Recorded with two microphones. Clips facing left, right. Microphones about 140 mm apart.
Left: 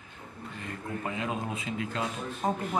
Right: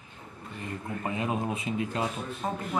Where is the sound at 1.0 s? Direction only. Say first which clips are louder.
Right 3 dB; 30° right (ahead or behind).